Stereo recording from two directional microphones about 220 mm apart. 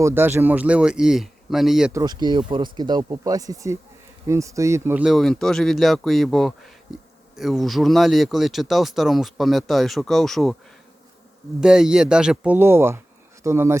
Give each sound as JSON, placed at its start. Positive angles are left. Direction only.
{"t": 0.0, "sound": "speech", "side_deg": -10}
{"t": 1.9, "sound": "speech", "side_deg": -15}
{"t": 11.6, "sound": "speech", "side_deg": -5}